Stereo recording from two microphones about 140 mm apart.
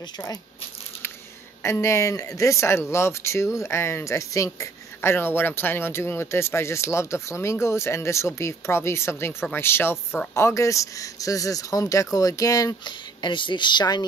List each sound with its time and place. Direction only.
1.6 s speech: 20° left (ahead or behind)